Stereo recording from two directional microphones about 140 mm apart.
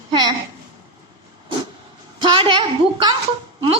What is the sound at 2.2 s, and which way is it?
Speech, 35° right (ahead or behind).